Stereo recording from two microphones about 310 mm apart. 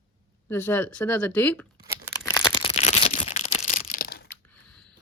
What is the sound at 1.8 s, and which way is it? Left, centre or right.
Tearing, centre.